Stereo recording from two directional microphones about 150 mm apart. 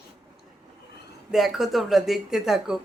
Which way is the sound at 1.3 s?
Centre (ahead or behind).